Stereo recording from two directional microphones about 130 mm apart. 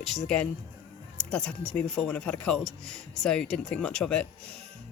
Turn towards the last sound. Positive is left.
turn(degrees=5)  # may be behind; listen again after turning